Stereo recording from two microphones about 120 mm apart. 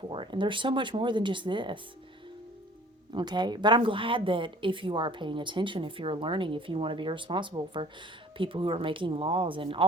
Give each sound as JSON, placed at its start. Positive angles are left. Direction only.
{"t": 0.1, "sound": "a woman's voice", "side_deg": -40}
{"t": 3.1, "sound": "a woman's voice", "side_deg": -40}